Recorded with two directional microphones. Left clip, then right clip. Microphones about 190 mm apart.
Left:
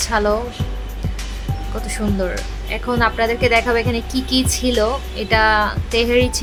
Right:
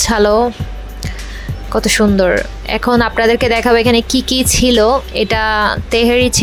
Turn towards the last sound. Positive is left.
turn(degrees=-35)  # may be behind; listen again after turning